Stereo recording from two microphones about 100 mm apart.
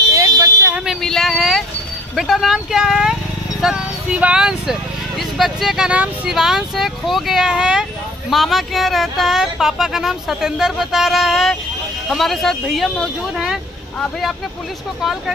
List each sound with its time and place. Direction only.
0.1 s fire alarm: 35° right (ahead or behind)
1.0 s a sound: 5° left (ahead or behind)
2.1 s speech: centre (ahead or behind)